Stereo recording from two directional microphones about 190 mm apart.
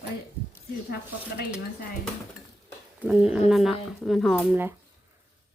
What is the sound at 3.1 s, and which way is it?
Speech, 5° right (ahead or behind).